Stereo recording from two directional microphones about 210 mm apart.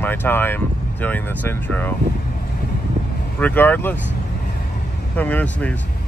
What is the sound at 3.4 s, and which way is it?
Speech, 10° left (ahead or behind).